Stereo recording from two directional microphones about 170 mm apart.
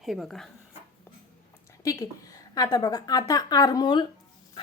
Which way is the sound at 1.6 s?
20° left (ahead or behind).